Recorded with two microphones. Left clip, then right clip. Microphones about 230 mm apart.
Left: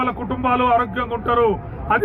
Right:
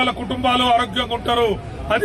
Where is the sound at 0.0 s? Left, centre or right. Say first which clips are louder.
Right 2 dB; centre.